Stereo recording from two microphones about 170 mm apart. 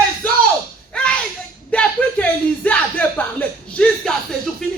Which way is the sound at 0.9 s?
5° left (ahead or behind).